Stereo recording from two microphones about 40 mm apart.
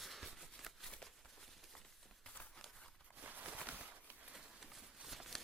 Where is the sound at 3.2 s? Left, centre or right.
Right.